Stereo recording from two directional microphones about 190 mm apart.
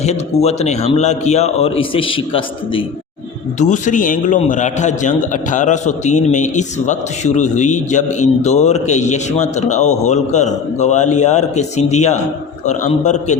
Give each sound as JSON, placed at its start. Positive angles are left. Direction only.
{"t": 0.4, "sound": "a man's voice", "side_deg": 35}
{"t": 3.6, "sound": "a man's voice", "side_deg": 40}